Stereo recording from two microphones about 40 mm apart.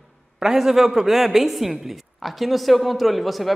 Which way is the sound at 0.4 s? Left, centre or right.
Centre.